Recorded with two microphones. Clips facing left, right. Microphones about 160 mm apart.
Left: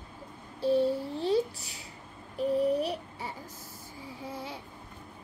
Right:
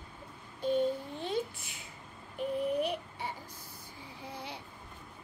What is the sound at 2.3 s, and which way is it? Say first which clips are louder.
Child singing: left 5 dB; 35° left (ahead or behind).